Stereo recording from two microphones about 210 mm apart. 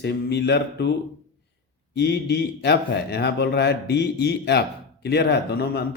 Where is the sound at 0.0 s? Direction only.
55° left (ahead or behind).